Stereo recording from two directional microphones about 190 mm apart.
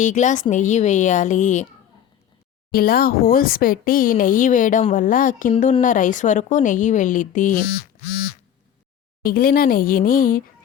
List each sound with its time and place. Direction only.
0.0 s a woman's voice: 40° left (ahead or behind)
2.7 s speech: 50° left (ahead or behind)
9.2 s speech: 50° left (ahead or behind)